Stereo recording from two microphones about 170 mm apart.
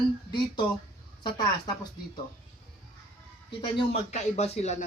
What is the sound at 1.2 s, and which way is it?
Speech, 25° left (ahead or behind).